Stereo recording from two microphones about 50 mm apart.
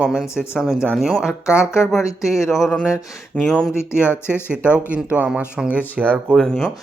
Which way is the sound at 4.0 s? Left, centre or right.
Left.